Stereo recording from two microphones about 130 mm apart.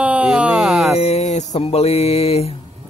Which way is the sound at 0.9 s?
55° left (ahead or behind).